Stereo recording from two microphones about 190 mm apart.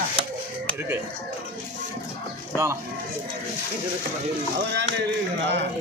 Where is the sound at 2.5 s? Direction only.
15° right (ahead or behind).